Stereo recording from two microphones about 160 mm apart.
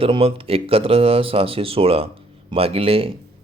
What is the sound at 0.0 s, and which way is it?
A man's voice, 35° right (ahead or behind).